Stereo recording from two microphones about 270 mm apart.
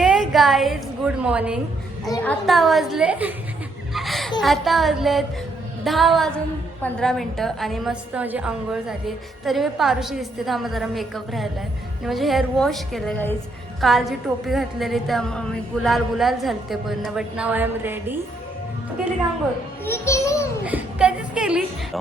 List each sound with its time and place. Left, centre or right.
0.0 s a woman's voice: centre
2.0 s a child's voice: centre
2.5 s a woman's voice: centre
3.9 s a sound: centre
4.4 s a woman's voice: centre
19.8 s a child's voice: centre
20.7 s a woman's voice: centre